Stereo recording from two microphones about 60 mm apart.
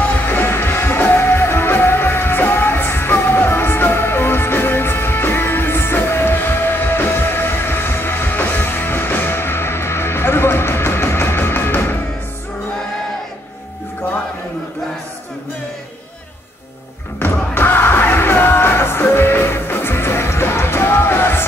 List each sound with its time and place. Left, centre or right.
0.1 s music: left
17.2 s music: left